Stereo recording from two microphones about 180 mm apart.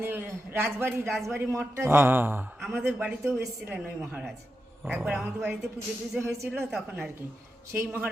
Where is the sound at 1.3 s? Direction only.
15° right (ahead or behind).